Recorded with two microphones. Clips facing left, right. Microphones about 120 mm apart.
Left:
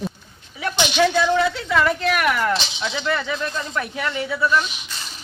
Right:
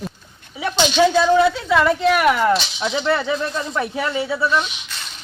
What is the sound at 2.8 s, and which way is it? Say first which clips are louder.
Speech: right 4 dB; 30° right (ahead or behind).